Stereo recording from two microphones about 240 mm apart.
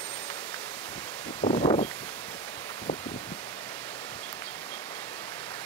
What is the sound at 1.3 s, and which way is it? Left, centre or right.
Rustling leaves, left.